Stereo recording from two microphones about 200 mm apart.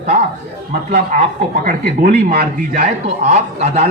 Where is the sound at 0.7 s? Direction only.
40° right (ahead or behind).